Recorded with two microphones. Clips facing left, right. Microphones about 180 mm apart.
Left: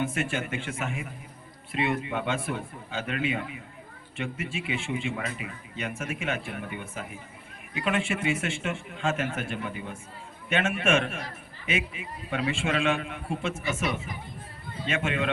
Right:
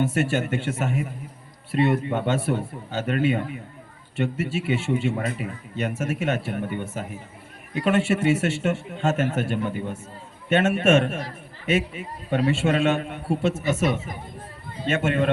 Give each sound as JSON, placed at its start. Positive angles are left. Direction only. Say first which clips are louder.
{"t": 0.0, "sound": "a man's voice", "louder": "right 6 dB", "side_deg": -40}
{"t": 4.5, "sound": "a man's voice", "louder": "right 7 dB", "side_deg": -40}